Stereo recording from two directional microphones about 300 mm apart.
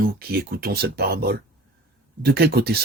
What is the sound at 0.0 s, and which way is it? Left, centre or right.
Speech, right.